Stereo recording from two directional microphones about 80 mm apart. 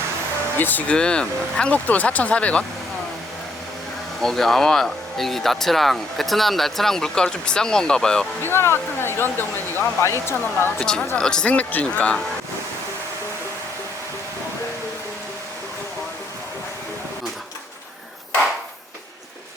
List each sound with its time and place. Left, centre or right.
0.6 s speech: left
4.2 s speech: centre
8.4 s speech: left
10.8 s speech: centre